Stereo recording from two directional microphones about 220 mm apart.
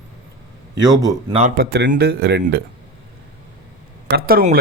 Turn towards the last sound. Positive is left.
turn(degrees=-40)  # may be behind; listen again after turning